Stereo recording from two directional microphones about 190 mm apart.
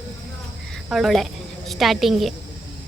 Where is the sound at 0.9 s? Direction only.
Centre (ahead or behind).